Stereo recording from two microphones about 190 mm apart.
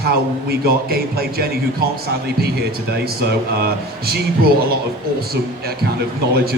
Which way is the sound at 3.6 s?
55° right (ahead or behind).